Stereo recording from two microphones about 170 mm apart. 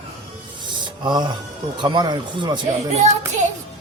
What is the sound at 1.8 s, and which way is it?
Speech, 25° right (ahead or behind).